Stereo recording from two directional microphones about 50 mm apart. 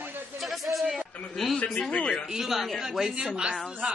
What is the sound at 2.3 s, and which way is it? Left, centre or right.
A woman's voice, centre.